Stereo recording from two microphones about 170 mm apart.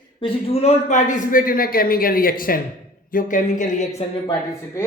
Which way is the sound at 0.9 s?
45° left (ahead or behind).